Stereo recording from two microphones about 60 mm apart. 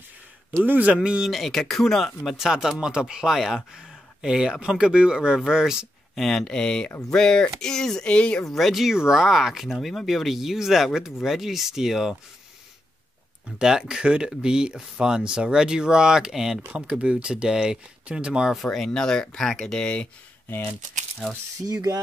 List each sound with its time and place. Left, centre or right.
0.7 s speech: right
1.0 s speech: centre
1.3 s speech: centre
2.2 s speech: centre
6.1 s speech: centre
8.5 s speech: centre
13.6 s speech: centre
18.6 s speech: centre